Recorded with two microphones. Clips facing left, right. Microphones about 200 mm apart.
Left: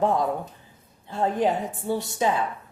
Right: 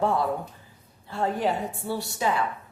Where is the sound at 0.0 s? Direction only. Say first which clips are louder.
Left 2 dB; 15° left (ahead or behind).